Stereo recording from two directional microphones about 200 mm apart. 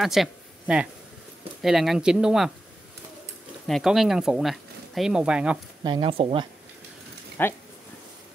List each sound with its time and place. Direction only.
0.0 s speech: centre (ahead or behind)
3.6 s speech: centre (ahead or behind)
5.9 s speech: 25° right (ahead or behind)
7.4 s speech: 10° left (ahead or behind)